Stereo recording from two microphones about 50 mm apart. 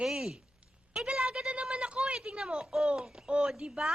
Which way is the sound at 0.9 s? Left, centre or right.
Centre.